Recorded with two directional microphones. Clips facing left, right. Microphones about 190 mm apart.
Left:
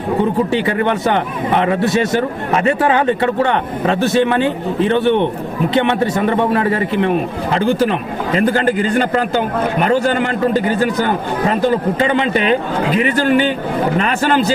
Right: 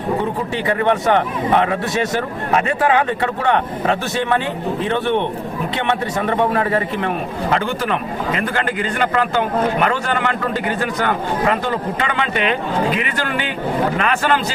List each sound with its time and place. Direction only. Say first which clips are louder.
1.0 s a man's voice: even; 30° left (ahead or behind)
5.7 s a man's voice: left 6 dB; 30° left (ahead or behind)